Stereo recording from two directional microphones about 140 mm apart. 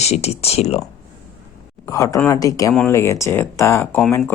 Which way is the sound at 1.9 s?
25° left (ahead or behind).